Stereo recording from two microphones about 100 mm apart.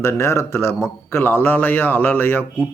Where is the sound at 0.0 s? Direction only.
25° left (ahead or behind).